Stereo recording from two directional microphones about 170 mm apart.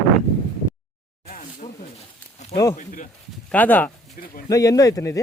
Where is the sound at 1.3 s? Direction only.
50° left (ahead or behind).